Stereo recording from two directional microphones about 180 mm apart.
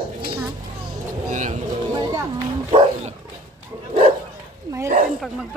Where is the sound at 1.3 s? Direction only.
45° right (ahead or behind).